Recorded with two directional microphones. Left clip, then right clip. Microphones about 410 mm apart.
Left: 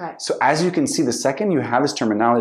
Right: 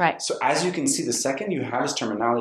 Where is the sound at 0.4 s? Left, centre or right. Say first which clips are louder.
Left 7 dB; left.